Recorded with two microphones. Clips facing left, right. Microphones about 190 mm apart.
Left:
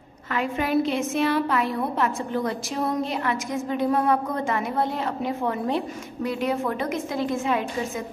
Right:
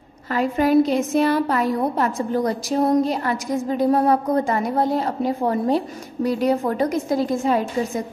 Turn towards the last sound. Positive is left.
turn(degrees=-35)  # may be behind; listen again after turning